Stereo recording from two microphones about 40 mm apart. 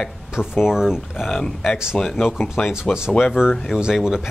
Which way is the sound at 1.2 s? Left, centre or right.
Centre.